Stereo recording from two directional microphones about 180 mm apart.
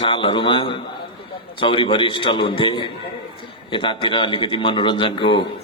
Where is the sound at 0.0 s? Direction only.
30° left (ahead or behind).